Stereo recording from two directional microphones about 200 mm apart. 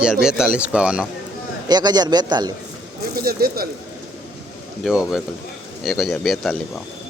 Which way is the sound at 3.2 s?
50° right (ahead or behind).